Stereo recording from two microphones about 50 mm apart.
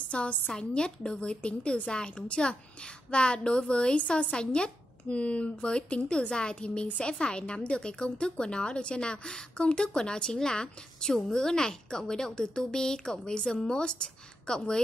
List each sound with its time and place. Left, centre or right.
0.1 s a woman's voice: left